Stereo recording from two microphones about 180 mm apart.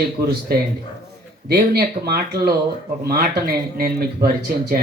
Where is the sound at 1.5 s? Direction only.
60° right (ahead or behind).